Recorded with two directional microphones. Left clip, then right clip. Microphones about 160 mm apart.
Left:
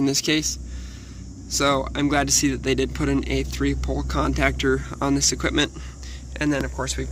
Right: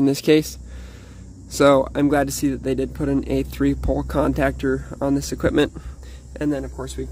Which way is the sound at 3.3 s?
60° right (ahead or behind).